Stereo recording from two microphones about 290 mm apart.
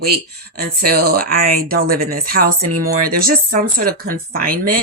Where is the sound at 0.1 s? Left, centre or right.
Right.